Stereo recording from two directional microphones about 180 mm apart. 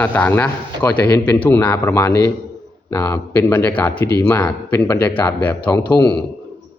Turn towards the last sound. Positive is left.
turn(degrees=10)  # may be behind; listen again after turning